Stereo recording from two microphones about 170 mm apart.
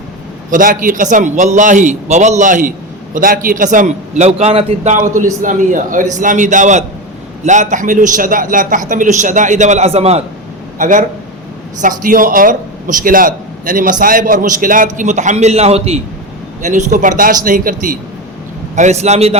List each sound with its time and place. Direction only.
0.5 s a man's voice: 55° right (ahead or behind); by 10.2 s 40° right (ahead or behind)
10.8 s a man's voice: 50° right (ahead or behind)
18.8 s a man's voice: 40° right (ahead or behind)